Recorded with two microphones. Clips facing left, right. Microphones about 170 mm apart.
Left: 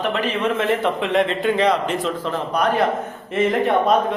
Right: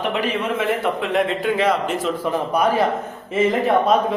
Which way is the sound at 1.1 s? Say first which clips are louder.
Left 1 dB; 5° right (ahead or behind).